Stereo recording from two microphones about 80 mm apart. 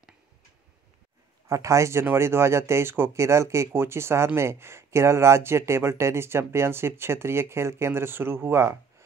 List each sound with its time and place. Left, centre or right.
1.5 s speech: right